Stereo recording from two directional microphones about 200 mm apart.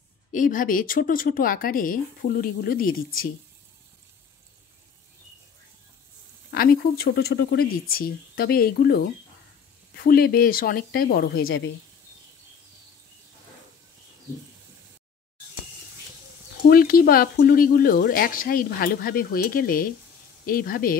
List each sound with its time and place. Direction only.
0.3 s speech: 40° left (ahead or behind)
6.5 s speech: 50° left (ahead or behind)
11.4 s a woman's voice: 80° left
16.6 s speech: 45° left (ahead or behind)